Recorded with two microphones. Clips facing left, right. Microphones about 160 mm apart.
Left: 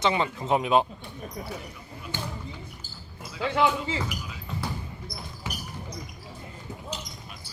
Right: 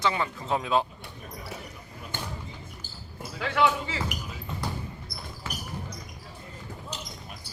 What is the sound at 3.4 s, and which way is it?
Speech, 25° left (ahead or behind).